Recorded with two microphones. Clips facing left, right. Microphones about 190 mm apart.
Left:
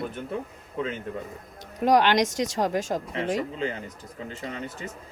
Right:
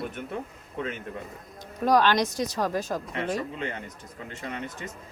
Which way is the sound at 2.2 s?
85° left.